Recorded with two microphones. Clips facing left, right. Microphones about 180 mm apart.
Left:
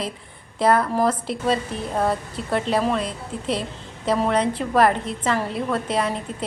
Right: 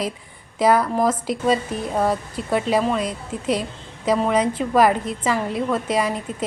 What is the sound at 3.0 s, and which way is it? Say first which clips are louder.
Speech: right 3 dB; 30° left (ahead or behind).